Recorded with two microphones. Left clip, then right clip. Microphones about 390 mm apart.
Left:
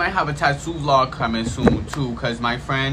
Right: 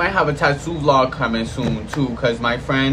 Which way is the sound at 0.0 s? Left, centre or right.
Centre.